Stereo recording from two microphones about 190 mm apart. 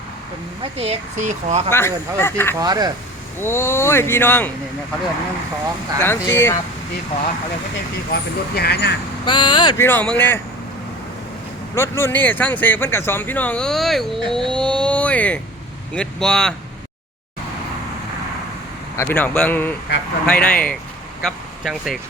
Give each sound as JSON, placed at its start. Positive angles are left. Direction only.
{"t": 0.8, "sound": "speech", "side_deg": -35}
{"t": 1.7, "sound": "speech", "side_deg": 15}
{"t": 2.6, "sound": "speech", "side_deg": -20}
{"t": 3.4, "sound": "speech", "side_deg": 10}
{"t": 6.0, "sound": "speech", "side_deg": 10}
{"t": 8.1, "sound": "speech", "side_deg": 55}
{"t": 9.2, "sound": "speech", "side_deg": 25}
{"t": 9.8, "sound": "speech", "side_deg": 10}
{"t": 11.7, "sound": "speech", "side_deg": 15}
{"t": 18.9, "sound": "speech", "side_deg": 10}